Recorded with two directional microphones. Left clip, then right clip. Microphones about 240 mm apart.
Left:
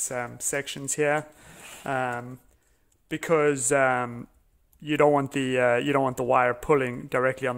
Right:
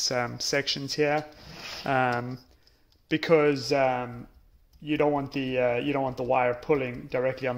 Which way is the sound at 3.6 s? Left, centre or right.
Left.